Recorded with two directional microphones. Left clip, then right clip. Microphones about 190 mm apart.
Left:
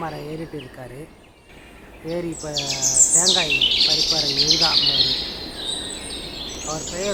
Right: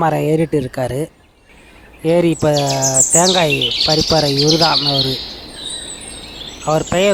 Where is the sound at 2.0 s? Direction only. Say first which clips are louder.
Right 15 dB; 55° right (ahead or behind).